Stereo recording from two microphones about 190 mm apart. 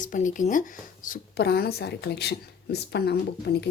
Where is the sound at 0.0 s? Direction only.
40° left (ahead or behind).